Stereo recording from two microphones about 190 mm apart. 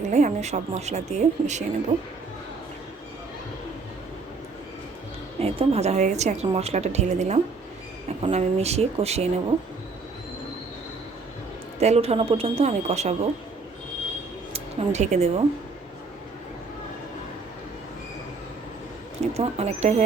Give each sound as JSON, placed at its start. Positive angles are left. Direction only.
{"t": 0.1, "sound": "a woman's voice", "side_deg": -35}
{"t": 5.4, "sound": "a woman's voice", "side_deg": -30}
{"t": 11.8, "sound": "a woman's voice", "side_deg": -35}
{"t": 14.5, "sound": "speech", "side_deg": -35}
{"t": 19.2, "sound": "a woman's voice", "side_deg": -35}